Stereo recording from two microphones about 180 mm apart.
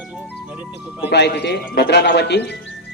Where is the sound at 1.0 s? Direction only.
70° left (ahead or behind).